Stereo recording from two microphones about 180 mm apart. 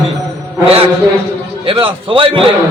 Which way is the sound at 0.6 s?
35° right (ahead or behind).